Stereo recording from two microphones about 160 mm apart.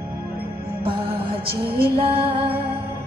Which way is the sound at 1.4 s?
35° right (ahead or behind).